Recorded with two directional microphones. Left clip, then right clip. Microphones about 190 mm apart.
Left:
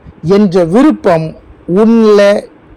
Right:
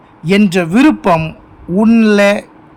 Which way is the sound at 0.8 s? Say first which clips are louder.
Even; 15° right (ahead or behind).